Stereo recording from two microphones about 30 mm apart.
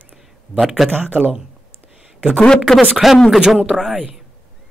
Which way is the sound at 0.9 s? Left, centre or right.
Right.